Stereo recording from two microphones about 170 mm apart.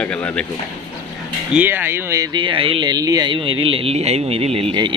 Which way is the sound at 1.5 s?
10° right (ahead or behind).